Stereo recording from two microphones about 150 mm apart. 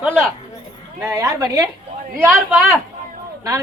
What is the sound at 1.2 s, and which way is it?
Speech, 25° right (ahead or behind).